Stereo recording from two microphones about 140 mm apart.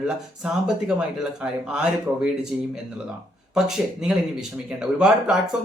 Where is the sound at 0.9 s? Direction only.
5° right (ahead or behind).